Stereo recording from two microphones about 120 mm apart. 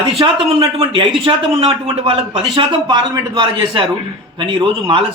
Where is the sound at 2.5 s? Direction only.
40° right (ahead or behind).